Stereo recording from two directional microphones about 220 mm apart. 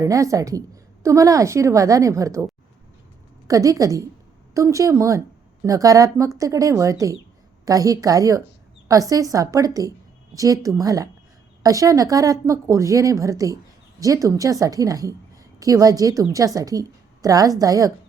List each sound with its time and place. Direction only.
0.0 s speech: 15° right (ahead or behind)